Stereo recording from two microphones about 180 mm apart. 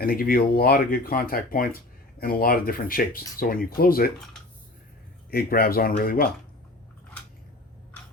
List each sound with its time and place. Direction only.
0.0 s speech: 55° left (ahead or behind)
5.3 s speech: 55° left (ahead or behind)